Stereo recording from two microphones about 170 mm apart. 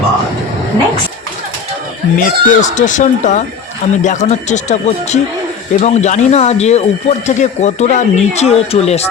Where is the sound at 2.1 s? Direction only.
50° left (ahead or behind).